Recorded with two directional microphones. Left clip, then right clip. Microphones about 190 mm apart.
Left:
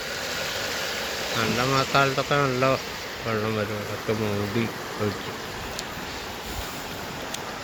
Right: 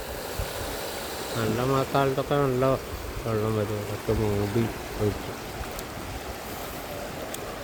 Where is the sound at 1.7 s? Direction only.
20° right (ahead or behind).